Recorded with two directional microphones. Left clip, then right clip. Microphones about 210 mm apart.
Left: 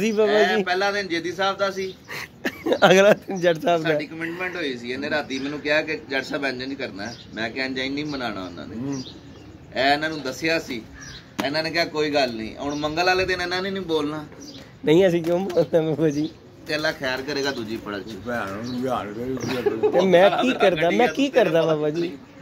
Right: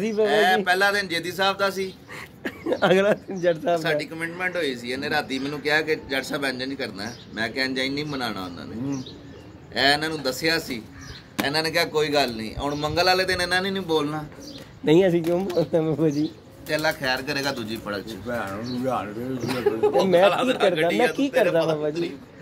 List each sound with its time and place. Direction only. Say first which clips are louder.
0.0 s speech: left 2 dB; 55° left (ahead or behind)
0.3 s speech: even; 50° right (ahead or behind)
2.1 s speech: left 4 dB; 50° left (ahead or behind)
3.8 s speech: left 1 dB; 50° right (ahead or behind)
9.8 s speech: even; 50° right (ahead or behind)
13.8 s a man's voice: even; 10° right (ahead or behind)
14.9 s speech: left 1 dB; 5° left (ahead or behind)
17.0 s speech: even; 45° right (ahead or behind)
18.3 s speech: left 1 dB; 20° left (ahead or behind)
19.4 s speech: even; 50° right (ahead or behind)
21.2 s speech: left 2 dB; 50° left (ahead or behind)